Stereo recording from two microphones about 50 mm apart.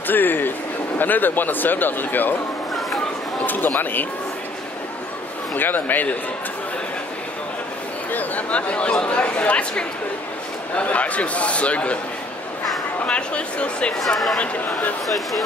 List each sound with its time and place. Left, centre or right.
0.0 s a sound: left
0.9 s speech: left
3.4 s speech: left
5.5 s speech: left
8.1 s speech: left
13.0 s speech: left
13.9 s speech: centre
14.4 s speech: left
15.0 s speech: centre